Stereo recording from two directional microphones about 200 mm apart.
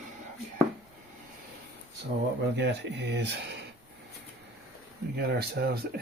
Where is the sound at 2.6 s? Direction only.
60° right (ahead or behind).